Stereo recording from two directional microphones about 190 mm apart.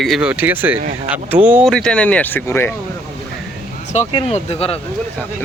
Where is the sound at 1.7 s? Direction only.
5° left (ahead or behind).